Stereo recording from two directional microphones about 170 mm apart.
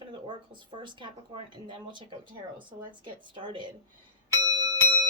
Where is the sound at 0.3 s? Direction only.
30° right (ahead or behind).